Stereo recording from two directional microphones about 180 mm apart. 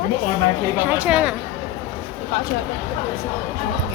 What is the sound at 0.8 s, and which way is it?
Speech, 10° right (ahead or behind).